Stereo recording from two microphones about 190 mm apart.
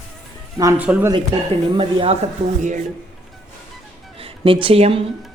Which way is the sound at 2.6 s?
40° right (ahead or behind).